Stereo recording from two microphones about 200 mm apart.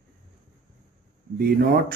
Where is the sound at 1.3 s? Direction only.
50° right (ahead or behind).